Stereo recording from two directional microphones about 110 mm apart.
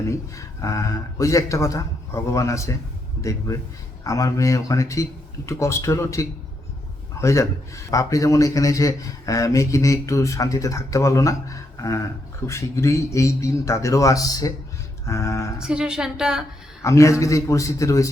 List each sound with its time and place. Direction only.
0.1 s a man's voice: 30° left (ahead or behind)
15.5 s a woman's voice: 5° right (ahead or behind)
16.8 s a man's voice: 25° left (ahead or behind)